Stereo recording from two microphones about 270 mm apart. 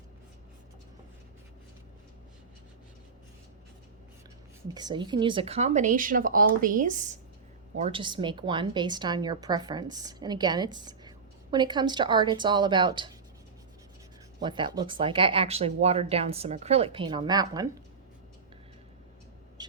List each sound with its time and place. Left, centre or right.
4.7 s a woman's voice: centre
14.4 s speech: centre